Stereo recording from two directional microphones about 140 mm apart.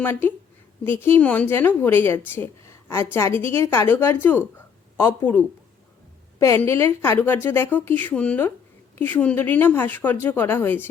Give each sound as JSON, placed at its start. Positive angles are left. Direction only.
{"t": 0.0, "sound": "a woman's voice", "side_deg": 15}
{"t": 6.6, "sound": "a woman's voice", "side_deg": 20}